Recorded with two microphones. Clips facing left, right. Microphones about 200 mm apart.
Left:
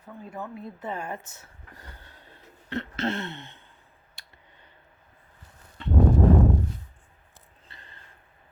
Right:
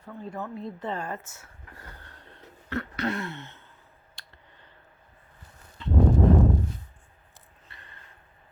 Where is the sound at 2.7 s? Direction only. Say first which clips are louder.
Even; 25° left (ahead or behind).